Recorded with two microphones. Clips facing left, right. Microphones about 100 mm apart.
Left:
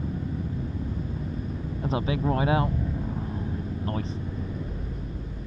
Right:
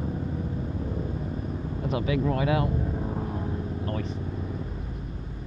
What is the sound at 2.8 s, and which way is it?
Vehicle, 30° right (ahead or behind).